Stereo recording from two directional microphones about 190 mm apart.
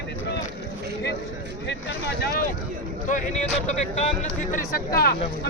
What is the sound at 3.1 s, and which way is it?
Speech, 40° left (ahead or behind).